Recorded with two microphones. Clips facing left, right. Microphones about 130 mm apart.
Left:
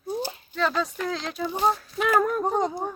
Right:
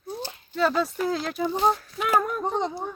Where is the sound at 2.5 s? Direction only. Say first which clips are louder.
Left 2 dB; 45° left (ahead or behind).